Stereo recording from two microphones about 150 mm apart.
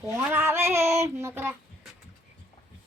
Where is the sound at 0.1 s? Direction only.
15° right (ahead or behind).